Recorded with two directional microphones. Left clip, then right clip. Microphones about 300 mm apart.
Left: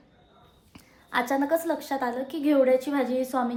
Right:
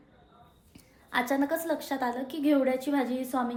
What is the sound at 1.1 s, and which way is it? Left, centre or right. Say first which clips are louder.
A woman's voice: left 3 dB; centre.